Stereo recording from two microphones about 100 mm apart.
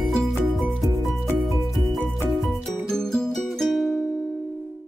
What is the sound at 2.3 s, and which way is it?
Music, 5° right (ahead or behind).